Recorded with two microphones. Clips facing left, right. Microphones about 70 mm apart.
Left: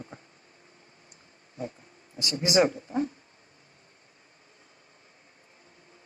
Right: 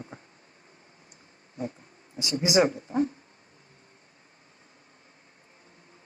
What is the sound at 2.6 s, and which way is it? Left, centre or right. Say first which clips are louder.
Speech: right 1 dB; right.